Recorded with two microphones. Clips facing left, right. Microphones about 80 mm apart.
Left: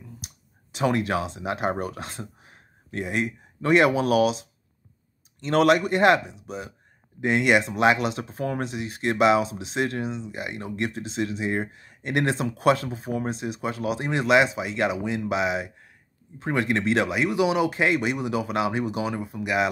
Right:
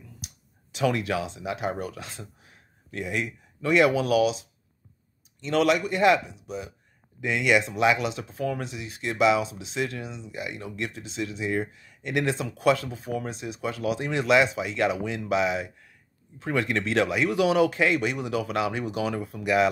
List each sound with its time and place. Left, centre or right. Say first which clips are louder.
0.7 s speech: left 2 dB; left; by 19.7 s centre